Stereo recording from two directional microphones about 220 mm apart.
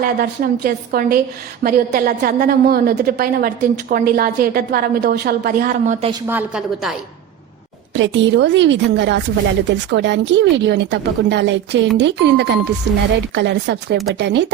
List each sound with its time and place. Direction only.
0.0 s a woman's voice: 40° right (ahead or behind)
6.1 s a woman's voice: 10° right (ahead or behind)
7.9 s a woman's voice: 55° right (ahead or behind)